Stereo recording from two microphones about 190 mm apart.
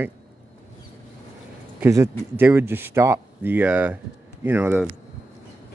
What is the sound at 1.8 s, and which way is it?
Speech, 15° right (ahead or behind).